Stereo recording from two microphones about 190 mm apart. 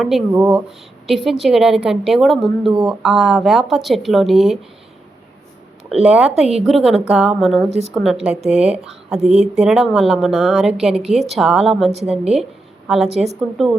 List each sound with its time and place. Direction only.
0.0 s a woman's voice: centre (ahead or behind)
5.9 s a woman's voice: 5° right (ahead or behind)
11.9 s a woman's voice: 35° right (ahead or behind)
13.1 s a woman's voice: centre (ahead or behind)